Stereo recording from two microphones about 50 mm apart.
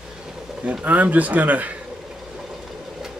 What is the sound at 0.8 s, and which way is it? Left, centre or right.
Speech, right.